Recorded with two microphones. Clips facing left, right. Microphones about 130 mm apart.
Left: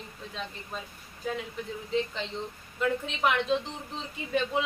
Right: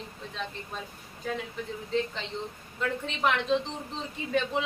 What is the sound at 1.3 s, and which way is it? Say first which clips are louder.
Speech: even; centre (ahead or behind).